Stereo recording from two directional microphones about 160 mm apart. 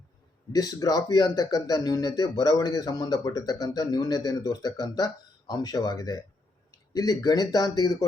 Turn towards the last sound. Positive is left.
turn(degrees=25)  # may be behind; listen again after turning